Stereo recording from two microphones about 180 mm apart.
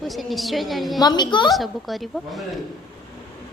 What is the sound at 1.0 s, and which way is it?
Speech, 25° left (ahead or behind).